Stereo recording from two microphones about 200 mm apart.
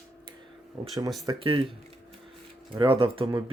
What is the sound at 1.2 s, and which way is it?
Speech, 25° right (ahead or behind).